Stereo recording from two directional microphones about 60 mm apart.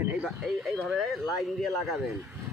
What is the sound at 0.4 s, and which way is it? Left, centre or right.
Speech, centre.